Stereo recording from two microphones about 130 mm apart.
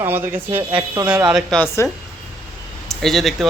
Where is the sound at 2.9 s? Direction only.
5° left (ahead or behind).